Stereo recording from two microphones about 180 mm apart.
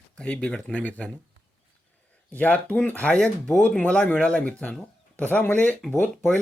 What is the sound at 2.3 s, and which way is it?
Speech, 10° left (ahead or behind).